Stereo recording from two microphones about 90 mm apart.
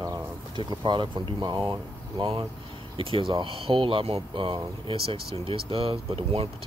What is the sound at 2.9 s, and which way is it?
Speech, 80° right.